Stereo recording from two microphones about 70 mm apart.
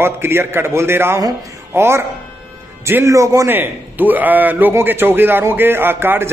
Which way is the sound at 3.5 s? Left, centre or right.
Right.